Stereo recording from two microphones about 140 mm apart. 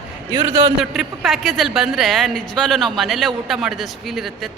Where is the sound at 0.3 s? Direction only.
30° right (ahead or behind).